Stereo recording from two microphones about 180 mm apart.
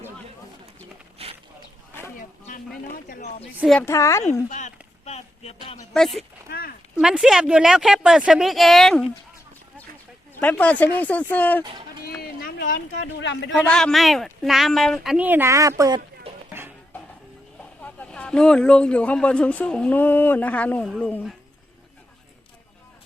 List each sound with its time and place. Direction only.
1.2 s a sound: 35° right (ahead or behind)
3.8 s speech: 15° left (ahead or behind)
4.4 s a sound: 40° left (ahead or behind)
6.5 s a sound: 55° left (ahead or behind)
6.9 s speech: 5° right (ahead or behind)
10.4 s speech: 10° left (ahead or behind)
11.6 s run: 25° right (ahead or behind)
12.0 s a sound: 60° left (ahead or behind)
13.0 s speech: 75° left (ahead or behind)
13.5 s speech: 5° left (ahead or behind); by 16.0 s 20° right (ahead or behind)
16.5 s music: 10° right (ahead or behind)
17.8 s speech: 5° left (ahead or behind)